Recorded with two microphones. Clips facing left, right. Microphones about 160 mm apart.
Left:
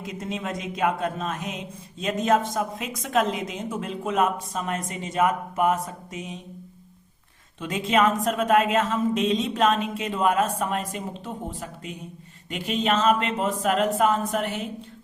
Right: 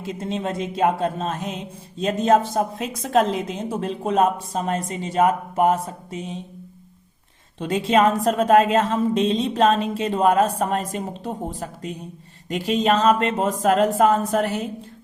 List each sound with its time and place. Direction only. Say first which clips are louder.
0.0 s speech: right 5 dB; 30° right (ahead or behind)
7.6 s speech: right 4 dB; 35° right (ahead or behind)